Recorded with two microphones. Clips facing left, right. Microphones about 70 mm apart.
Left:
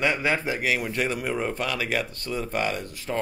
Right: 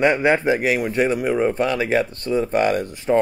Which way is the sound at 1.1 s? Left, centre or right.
Centre.